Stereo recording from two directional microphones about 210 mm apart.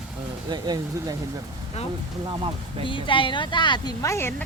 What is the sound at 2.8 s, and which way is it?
Speech, 25° left (ahead or behind).